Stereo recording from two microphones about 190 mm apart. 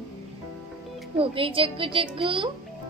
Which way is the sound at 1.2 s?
30° right (ahead or behind).